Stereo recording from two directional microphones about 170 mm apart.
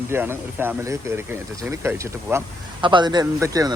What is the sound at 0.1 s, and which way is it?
Speech, 15° right (ahead or behind).